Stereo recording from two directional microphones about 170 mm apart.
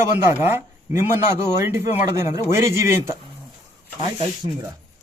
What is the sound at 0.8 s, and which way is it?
A man's voice, 15° right (ahead or behind).